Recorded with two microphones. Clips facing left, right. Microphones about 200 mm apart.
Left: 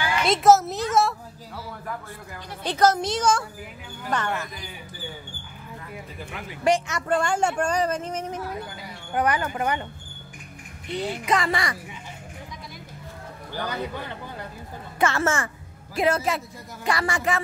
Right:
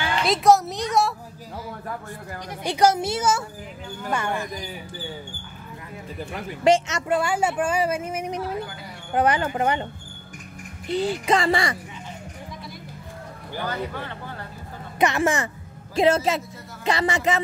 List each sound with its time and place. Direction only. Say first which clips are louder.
0.2 s speech: left 1 dB; centre (ahead or behind)
2.6 s speech: right 1 dB; 10° right (ahead or behind)
6.6 s speech: right 3 dB; 20° right (ahead or behind)
7.1 s speech: even; 5° right (ahead or behind)
9.1 s speech: right 3 dB; 25° right (ahead or behind)
10.9 s speech: right 4 dB; 30° right (ahead or behind)
15.0 s speech: right 2 dB; 15° right (ahead or behind)